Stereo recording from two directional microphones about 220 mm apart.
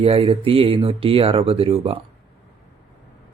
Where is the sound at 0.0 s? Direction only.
25° right (ahead or behind).